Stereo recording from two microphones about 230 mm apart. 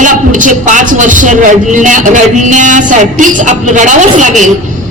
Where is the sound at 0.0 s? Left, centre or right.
Right.